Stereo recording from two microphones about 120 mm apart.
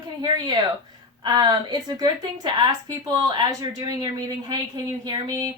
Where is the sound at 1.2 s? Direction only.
35° right (ahead or behind).